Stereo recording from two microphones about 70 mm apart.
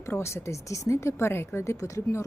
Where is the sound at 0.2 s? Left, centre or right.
Left.